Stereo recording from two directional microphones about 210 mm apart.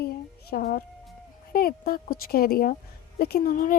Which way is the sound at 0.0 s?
45° left (ahead or behind).